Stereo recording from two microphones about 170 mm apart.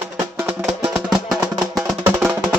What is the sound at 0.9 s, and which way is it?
Music, centre (ahead or behind).